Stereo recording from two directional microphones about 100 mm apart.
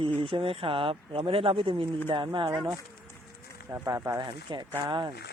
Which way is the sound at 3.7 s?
30° right (ahead or behind).